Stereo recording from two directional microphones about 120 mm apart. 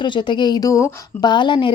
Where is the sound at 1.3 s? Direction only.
40° left (ahead or behind).